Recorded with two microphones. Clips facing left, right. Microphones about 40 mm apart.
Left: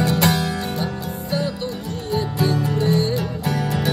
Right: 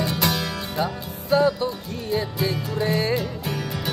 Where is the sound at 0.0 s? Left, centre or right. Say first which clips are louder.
Left 5 dB; left.